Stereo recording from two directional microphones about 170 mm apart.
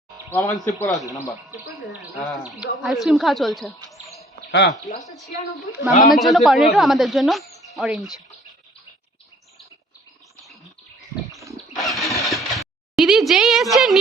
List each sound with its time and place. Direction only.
0.3 s a man's voice: 15° left (ahead or behind)
1.9 s speech: centre (ahead or behind)
3.8 s bird: centre (ahead or behind)
4.9 s speech: centre (ahead or behind)
11.8 s vehicle: centre (ahead or behind)